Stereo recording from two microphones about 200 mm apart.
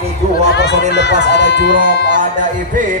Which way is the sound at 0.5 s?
60° left (ahead or behind).